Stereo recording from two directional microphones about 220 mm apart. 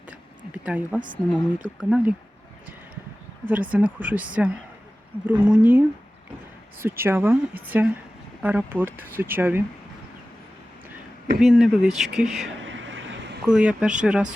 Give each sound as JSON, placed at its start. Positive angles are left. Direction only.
{"t": 0.1, "sound": "a sound", "side_deg": -5}
{"t": 1.8, "sound": "a woman's voice", "side_deg": -5}
{"t": 3.4, "sound": "a woman's voice", "side_deg": -5}
{"t": 11.3, "sound": "speech", "side_deg": -5}
{"t": 12.6, "sound": "a sound", "side_deg": -60}
{"t": 13.5, "sound": "speech", "side_deg": -5}